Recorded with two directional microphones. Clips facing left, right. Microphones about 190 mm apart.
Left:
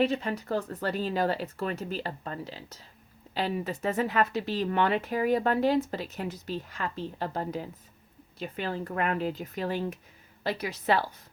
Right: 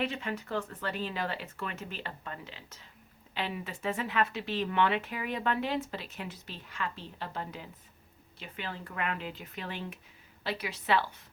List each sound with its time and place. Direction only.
0.0 s speech: 40° left (ahead or behind)